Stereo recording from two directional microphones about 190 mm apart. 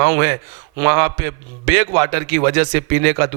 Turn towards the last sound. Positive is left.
turn(degrees=-20)  # may be behind; listen again after turning